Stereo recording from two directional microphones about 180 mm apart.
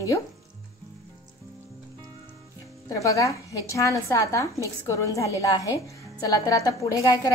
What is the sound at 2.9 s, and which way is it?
A woman's voice, 20° left (ahead or behind).